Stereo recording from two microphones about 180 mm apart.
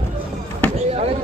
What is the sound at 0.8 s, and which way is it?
Basketball bounce, 35° right (ahead or behind).